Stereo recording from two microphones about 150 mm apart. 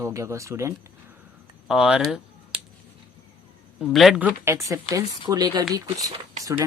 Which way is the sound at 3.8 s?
Centre (ahead or behind).